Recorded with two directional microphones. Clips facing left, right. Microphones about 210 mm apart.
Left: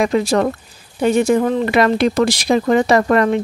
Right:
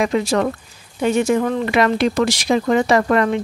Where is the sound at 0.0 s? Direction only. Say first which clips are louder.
Left 2 dB; 35° left (ahead or behind).